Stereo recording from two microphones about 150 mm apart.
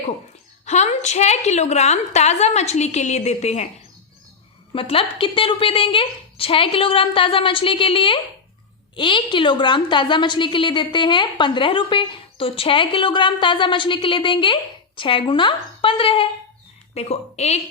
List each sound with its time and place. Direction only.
0.6 s a woman's voice: 50° left (ahead or behind)
4.7 s a woman's voice: 35° left (ahead or behind)